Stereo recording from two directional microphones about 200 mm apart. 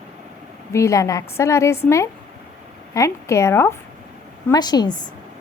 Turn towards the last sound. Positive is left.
turn(degrees=20)  # may be behind; listen again after turning